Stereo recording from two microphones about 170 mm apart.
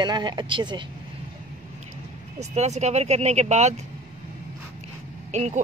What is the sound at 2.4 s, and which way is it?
Speech, 40° right (ahead or behind).